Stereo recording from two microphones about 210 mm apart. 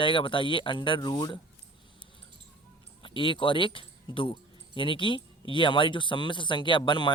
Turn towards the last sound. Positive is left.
turn(degrees=20)  # may be behind; listen again after turning